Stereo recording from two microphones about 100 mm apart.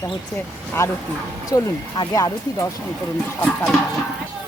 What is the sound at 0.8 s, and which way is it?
Speech, 30° left (ahead or behind).